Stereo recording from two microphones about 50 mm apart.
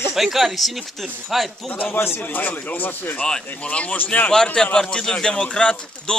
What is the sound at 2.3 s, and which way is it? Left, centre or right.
Speech, left.